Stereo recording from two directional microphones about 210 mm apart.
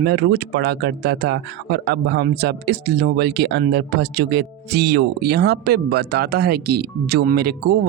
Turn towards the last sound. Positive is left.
turn(degrees=-50)  # may be behind; listen again after turning